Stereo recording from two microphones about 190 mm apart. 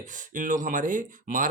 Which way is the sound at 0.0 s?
40° right (ahead or behind).